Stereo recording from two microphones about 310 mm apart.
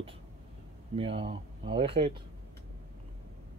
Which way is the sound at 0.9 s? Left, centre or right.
Centre.